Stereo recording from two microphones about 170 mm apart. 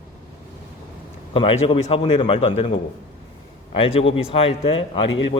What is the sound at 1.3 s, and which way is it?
A man's voice, 30° left (ahead or behind).